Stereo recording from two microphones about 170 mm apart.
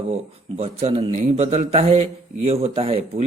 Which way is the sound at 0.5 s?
35° right (ahead or behind).